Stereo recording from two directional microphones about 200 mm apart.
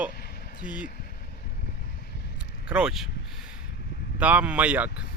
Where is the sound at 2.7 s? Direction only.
5° right (ahead or behind).